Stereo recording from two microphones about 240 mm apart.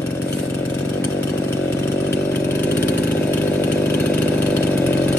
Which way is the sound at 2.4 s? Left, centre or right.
Centre.